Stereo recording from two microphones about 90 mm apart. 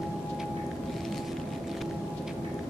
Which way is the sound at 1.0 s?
Centre (ahead or behind).